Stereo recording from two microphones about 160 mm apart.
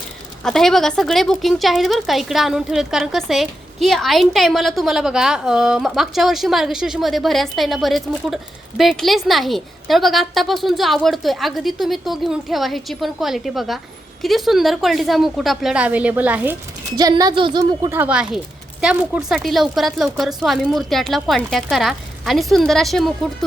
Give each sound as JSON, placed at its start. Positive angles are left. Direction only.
{"t": 0.4, "sound": "a woman's voice", "side_deg": 0}
{"t": 17.0, "sound": "speech", "side_deg": -25}
{"t": 17.9, "sound": "a woman's voice", "side_deg": -10}